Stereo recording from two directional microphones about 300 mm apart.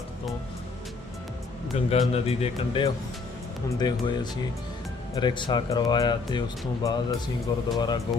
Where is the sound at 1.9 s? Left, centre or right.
Centre.